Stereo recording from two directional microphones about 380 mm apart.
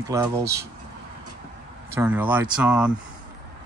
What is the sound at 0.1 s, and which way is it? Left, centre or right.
Speech, centre.